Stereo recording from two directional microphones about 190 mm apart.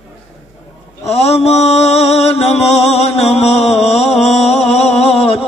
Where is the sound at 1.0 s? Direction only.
35° left (ahead or behind).